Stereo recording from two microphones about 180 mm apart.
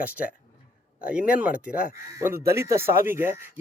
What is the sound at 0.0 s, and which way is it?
Speech, 10° right (ahead or behind).